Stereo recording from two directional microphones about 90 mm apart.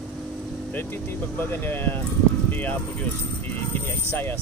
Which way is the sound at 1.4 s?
25° left (ahead or behind).